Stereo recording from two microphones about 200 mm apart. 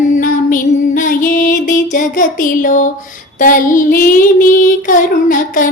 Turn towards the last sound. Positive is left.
turn(degrees=40)  # may be behind; listen again after turning